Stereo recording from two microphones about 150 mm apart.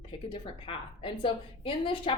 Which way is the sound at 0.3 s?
35° left (ahead or behind).